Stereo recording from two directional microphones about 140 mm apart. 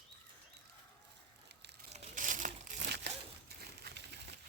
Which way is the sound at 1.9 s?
70° right (ahead or behind).